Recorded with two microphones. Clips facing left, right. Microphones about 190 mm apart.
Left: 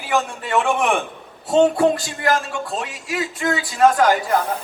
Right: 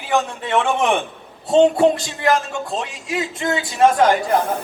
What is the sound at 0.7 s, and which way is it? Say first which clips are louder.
Speech: right 1 dB; 20° right (ahead or behind).